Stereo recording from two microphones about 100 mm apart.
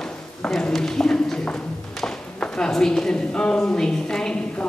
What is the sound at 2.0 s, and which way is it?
A woman's voice, 10° left (ahead or behind).